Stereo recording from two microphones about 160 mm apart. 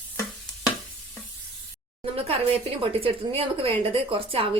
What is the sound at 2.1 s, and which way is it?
A woman's voice, 40° right (ahead or behind).